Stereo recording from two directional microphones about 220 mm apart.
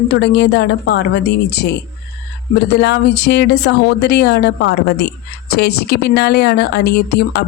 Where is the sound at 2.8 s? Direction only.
50° left (ahead or behind).